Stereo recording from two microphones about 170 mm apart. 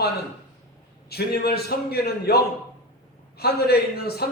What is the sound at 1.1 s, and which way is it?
A man's voice, 65° left (ahead or behind).